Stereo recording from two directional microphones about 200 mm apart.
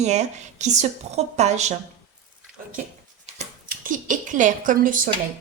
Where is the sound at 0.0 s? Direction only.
35° right (ahead or behind).